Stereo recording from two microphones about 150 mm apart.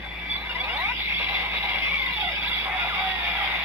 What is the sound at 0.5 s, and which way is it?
Squeal, 15° right (ahead or behind).